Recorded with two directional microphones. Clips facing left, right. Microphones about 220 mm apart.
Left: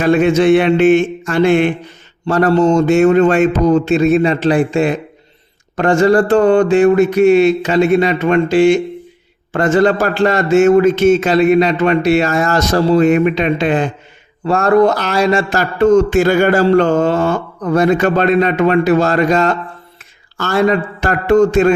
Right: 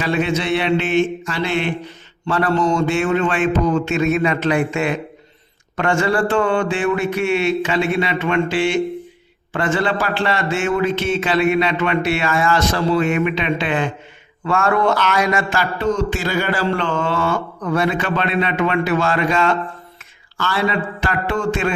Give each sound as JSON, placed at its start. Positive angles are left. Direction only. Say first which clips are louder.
{"t": 0.0, "sound": "mantra", "louder": "left 9 dB", "side_deg": 50}
{"t": 2.2, "sound": "a man's voice", "louder": "left 6 dB", "side_deg": 40}
{"t": 20.4, "sound": "mantra", "louder": "left 7 dB", "side_deg": 45}